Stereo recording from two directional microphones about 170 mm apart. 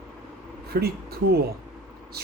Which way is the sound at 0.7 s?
65° right (ahead or behind).